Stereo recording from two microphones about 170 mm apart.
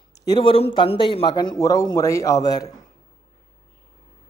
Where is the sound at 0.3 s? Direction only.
30° left (ahead or behind).